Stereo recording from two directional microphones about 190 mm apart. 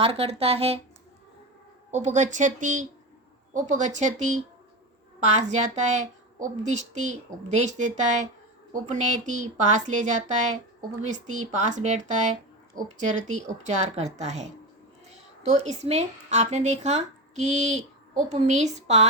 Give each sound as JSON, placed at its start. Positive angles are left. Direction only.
{"t": 0.0, "sound": "speech", "side_deg": -30}
{"t": 1.9, "sound": "speech", "side_deg": -35}
{"t": 5.4, "sound": "speech", "side_deg": -40}